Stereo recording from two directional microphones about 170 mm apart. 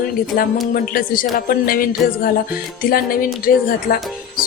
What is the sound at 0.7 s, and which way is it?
Speech, 55° left (ahead or behind).